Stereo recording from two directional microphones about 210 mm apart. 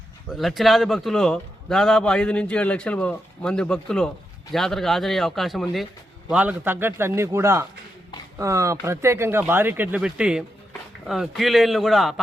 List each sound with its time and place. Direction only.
0.3 s a man's voice: centre (ahead or behind)